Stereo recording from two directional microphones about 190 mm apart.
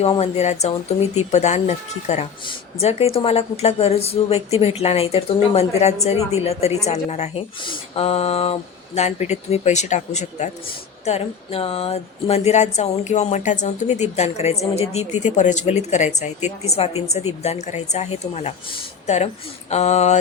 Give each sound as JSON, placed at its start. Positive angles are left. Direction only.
{"t": 0.0, "sound": "a woman's voice", "side_deg": 35}